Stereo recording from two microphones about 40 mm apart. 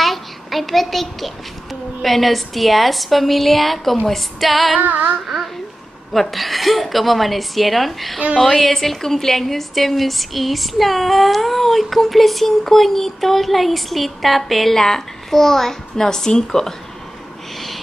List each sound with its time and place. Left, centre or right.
0.0 s a child's voice: centre
4.8 s child singing: right
6.1 s a woman's voice: centre